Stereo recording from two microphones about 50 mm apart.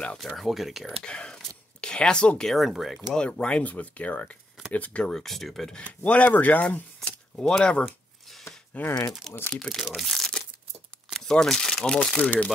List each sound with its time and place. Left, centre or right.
0.4 s speech: centre
1.0 s speech: centre
2.5 s speech: centre
3.2 s speech: left
5.1 s speech: centre
6.0 s speech: left
7.1 s a sound: centre
8.7 s speech: left
9.5 s speech: centre
12.2 s speech: left